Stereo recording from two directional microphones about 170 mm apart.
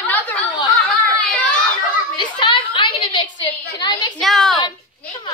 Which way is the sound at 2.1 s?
30° left (ahead or behind).